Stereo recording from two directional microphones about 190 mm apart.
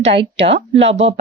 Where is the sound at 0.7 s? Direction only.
35° right (ahead or behind).